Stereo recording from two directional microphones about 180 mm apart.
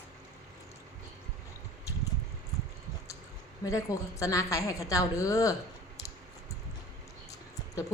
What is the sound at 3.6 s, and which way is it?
A woman's voice, 20° left (ahead or behind).